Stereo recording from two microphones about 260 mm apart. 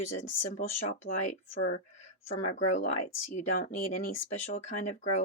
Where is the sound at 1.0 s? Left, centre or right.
Left.